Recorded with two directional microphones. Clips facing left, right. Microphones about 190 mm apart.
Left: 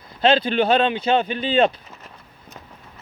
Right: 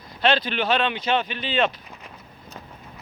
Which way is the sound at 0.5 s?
35° left (ahead or behind).